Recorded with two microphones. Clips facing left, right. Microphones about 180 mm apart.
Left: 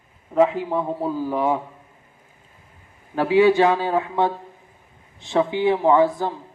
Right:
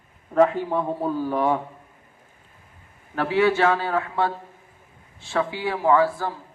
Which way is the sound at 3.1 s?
15° left (ahead or behind).